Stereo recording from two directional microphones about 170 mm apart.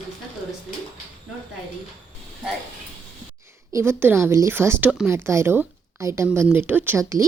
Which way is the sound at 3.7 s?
15° right (ahead or behind).